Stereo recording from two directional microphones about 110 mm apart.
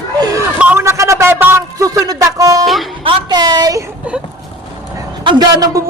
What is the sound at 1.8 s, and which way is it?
Music, 35° right (ahead or behind).